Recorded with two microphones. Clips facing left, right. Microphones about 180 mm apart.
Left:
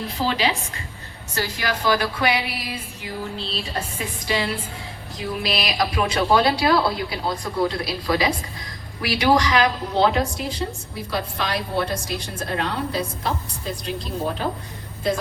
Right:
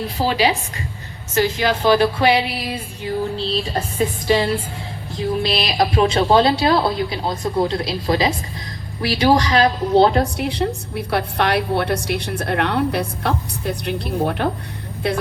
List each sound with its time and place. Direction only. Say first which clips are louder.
0.2 s a woman's voice: right 3 dB; 40° right (ahead or behind)
1.3 s a woman's voice: right 8 dB; 25° right (ahead or behind)
10.3 s a woman's voice: right 6 dB; 65° right (ahead or behind)